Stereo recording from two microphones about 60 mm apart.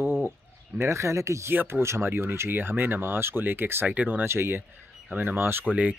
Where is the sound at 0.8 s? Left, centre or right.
Right.